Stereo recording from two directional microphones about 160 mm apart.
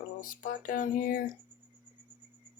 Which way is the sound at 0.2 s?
55° left (ahead or behind).